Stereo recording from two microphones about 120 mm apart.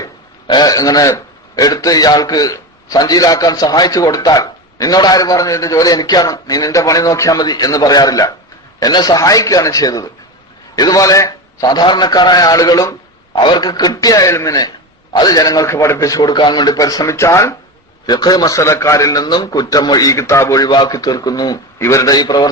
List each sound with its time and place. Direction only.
0.0 s a man's voice: 35° left (ahead or behind)
13.3 s a man's voice: 40° left (ahead or behind)